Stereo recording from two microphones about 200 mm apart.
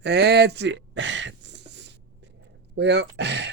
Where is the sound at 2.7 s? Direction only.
60° right (ahead or behind).